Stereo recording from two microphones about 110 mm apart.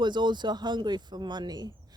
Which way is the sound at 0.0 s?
45° right (ahead or behind).